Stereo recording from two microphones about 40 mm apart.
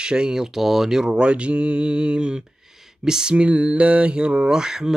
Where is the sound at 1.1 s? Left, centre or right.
Right.